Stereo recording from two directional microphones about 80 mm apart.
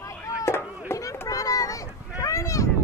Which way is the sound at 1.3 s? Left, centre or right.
Left.